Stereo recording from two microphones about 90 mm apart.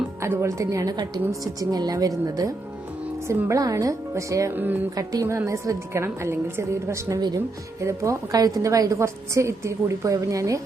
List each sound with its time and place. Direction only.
0.2 s a woman's voice: 30° right (ahead or behind)
4.5 s speech: 20° right (ahead or behind)
4.9 s a woman's voice: 40° right (ahead or behind)